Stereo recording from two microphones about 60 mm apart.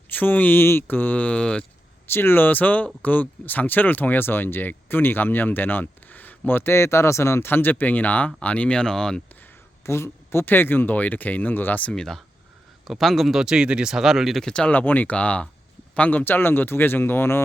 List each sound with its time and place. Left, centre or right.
0.1 s speech: left
2.0 s speech: left; by 9.2 s centre
9.8 s speech: left
10.4 s speech: left
11.9 s speech: centre
14.4 s speech: centre
14.7 s speech: left